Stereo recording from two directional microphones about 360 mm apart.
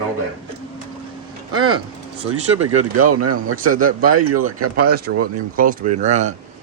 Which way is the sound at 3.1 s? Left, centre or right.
Right.